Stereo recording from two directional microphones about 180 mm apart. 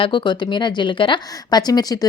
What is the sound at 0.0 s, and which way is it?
Speech, 25° left (ahead or behind).